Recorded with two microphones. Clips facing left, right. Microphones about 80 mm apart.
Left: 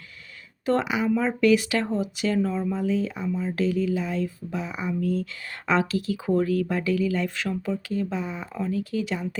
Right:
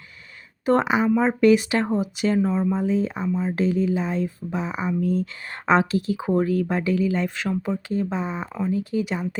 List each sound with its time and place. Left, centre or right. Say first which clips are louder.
0.6 s speech: right 4 dB; right